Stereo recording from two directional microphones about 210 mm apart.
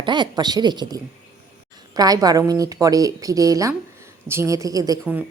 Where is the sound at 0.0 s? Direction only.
20° right (ahead or behind).